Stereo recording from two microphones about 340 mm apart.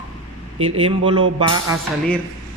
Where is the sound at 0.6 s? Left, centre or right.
Centre.